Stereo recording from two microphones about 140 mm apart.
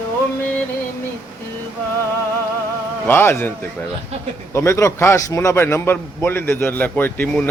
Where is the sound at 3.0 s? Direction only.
15° left (ahead or behind).